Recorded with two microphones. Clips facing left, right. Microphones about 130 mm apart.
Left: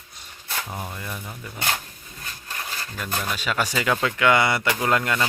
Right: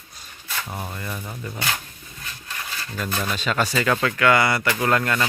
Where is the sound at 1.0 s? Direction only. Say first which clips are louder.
Right 2 dB; 10° left (ahead or behind).